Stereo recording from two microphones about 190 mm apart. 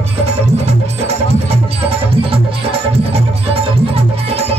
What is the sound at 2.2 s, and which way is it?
Music, 30° right (ahead or behind).